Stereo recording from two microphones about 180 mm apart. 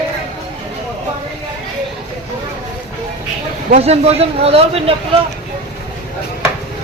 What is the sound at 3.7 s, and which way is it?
Speech, 35° right (ahead or behind).